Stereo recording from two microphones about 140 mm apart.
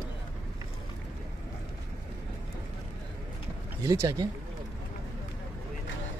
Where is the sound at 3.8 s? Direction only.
20° right (ahead or behind).